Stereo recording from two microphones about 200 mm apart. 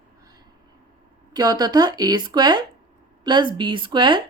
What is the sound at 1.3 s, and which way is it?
A woman's voice, 20° right (ahead or behind).